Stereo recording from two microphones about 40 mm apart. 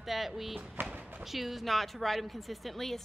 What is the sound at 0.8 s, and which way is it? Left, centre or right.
Speech, right.